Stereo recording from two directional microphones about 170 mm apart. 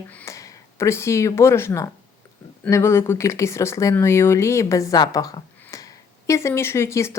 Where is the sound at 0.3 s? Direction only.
15° left (ahead or behind).